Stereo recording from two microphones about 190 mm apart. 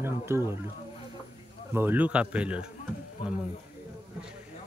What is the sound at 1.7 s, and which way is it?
Speech, 10° right (ahead or behind).